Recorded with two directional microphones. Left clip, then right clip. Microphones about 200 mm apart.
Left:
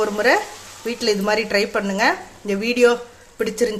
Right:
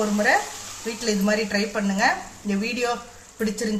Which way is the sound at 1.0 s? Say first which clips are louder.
Left 4 dB; 55° left (ahead or behind).